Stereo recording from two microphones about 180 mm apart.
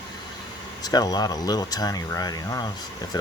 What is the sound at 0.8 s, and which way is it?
Speech, 20° left (ahead or behind).